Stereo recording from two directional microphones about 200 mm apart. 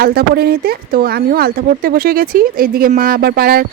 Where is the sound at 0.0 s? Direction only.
50° right (ahead or behind).